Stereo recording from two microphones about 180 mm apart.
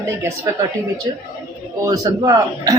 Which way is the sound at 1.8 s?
20° right (ahead or behind).